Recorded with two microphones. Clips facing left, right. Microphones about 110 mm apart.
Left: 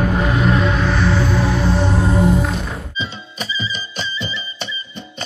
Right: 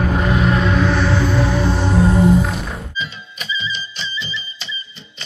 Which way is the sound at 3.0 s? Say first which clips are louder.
Left 1 dB; 35° left (ahead or behind).